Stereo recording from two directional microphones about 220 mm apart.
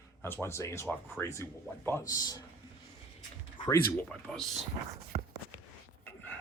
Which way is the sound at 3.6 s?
15° left (ahead or behind).